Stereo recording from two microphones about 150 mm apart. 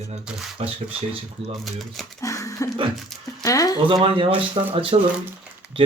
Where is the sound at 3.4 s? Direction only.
25° left (ahead or behind).